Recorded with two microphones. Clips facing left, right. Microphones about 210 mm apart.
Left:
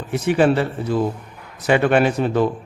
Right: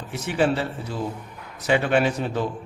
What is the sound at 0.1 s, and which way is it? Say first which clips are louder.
A man's voice: left 6 dB; 60° left (ahead or behind).